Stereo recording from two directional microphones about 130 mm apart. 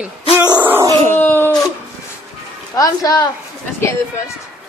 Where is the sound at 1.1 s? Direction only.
15° left (ahead or behind).